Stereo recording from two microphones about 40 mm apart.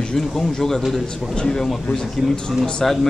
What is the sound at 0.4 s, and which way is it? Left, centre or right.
Speech, centre.